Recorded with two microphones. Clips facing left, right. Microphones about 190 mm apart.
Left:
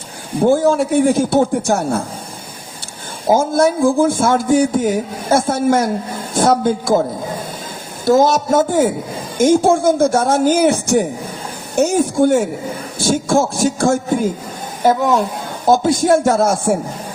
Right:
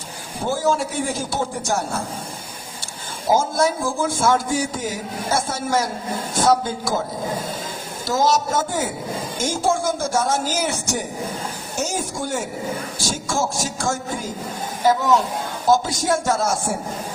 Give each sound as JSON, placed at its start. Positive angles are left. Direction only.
{"t": 0.4, "sound": "a man's voice", "side_deg": 55}
{"t": 3.3, "sound": "a man's voice", "side_deg": 55}
{"t": 8.0, "sound": "a man's voice", "side_deg": 55}
{"t": 15.6, "sound": "a man's voice", "side_deg": 55}